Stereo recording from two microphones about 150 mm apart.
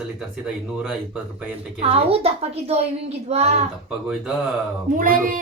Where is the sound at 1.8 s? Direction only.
40° right (ahead or behind).